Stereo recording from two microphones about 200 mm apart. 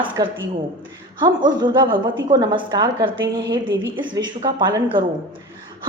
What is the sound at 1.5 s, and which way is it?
A woman's voice, 20° right (ahead or behind).